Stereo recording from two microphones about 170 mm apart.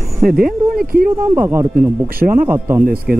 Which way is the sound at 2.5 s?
10° right (ahead or behind).